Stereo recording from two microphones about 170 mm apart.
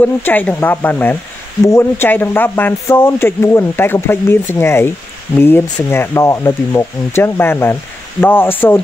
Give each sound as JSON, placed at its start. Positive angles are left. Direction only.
{"t": 0.0, "sound": "speech", "side_deg": 10}